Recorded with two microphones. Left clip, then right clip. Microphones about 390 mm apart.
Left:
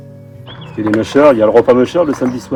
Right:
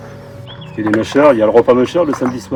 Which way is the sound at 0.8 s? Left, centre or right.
Centre.